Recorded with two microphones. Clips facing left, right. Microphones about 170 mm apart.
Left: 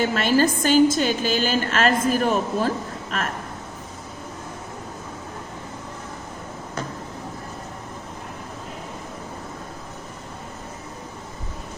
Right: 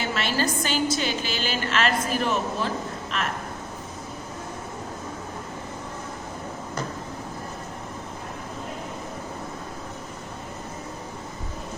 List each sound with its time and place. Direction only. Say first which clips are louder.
0.1 s a woman's voice: left 6 dB; 45° left (ahead or behind)